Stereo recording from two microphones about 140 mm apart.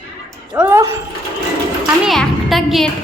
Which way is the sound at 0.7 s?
20° right (ahead or behind).